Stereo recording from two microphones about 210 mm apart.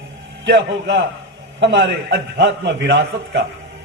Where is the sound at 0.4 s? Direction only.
50° right (ahead or behind).